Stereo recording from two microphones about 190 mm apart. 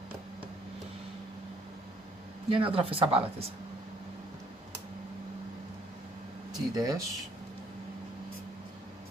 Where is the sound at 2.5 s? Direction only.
30° right (ahead or behind).